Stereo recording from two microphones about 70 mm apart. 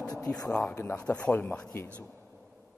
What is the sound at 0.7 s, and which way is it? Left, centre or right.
Speech, left.